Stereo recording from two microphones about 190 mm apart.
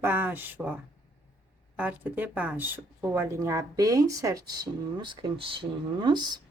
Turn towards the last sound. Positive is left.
turn(degrees=-20)  # may be behind; listen again after turning